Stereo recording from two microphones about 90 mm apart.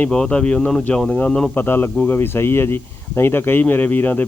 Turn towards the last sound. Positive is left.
turn(degrees=20)  # may be behind; listen again after turning